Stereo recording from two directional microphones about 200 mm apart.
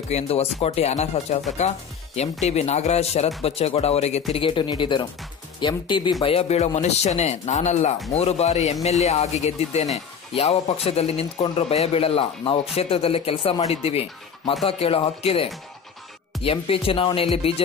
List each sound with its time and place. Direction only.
0.1 s speech: 30° left (ahead or behind)
2.4 s speech: 35° left (ahead or behind)